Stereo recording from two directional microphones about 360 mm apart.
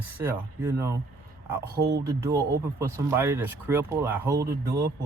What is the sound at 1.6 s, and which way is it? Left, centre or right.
Speech, right.